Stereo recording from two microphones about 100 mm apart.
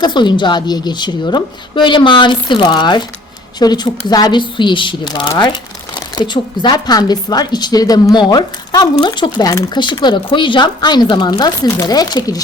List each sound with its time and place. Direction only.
0.0 s a woman's voice: 50° left (ahead or behind)